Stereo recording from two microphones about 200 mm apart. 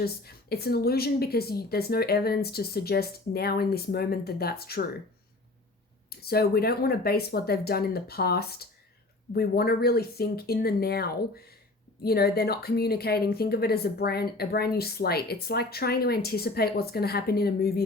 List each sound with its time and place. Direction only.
0.0 s speech: 50° left (ahead or behind)
6.1 s speech: 50° left (ahead or behind)